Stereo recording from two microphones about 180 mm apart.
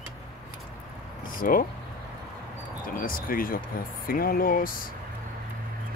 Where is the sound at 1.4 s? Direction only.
50° left (ahead or behind).